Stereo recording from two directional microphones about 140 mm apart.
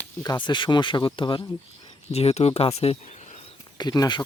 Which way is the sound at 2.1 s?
50° left (ahead or behind).